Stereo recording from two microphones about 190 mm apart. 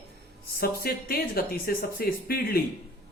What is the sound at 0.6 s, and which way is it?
Speech, 50° left (ahead or behind).